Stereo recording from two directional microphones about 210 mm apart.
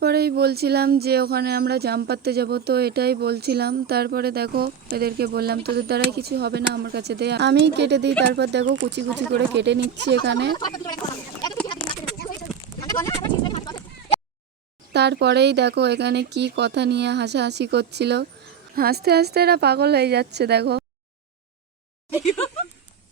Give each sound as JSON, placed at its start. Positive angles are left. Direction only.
{"t": 0.0, "sound": "speech", "side_deg": -50}
{"t": 10.5, "sound": "speech", "side_deg": 20}
{"t": 12.9, "sound": "sheep", "side_deg": 15}
{"t": 13.5, "sound": "a sound", "side_deg": 25}
{"t": 14.9, "sound": "speech", "side_deg": -55}